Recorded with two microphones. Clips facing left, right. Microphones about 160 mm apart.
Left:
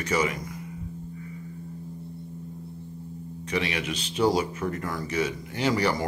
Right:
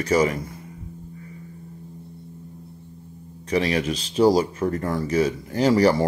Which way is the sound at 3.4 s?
35° right (ahead or behind).